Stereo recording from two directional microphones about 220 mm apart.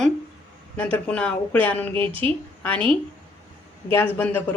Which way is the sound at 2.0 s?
25° right (ahead or behind).